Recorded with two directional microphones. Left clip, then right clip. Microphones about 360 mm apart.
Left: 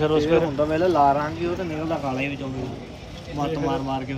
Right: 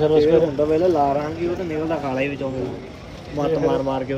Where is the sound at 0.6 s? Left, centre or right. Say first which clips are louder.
Right 3 dB; left.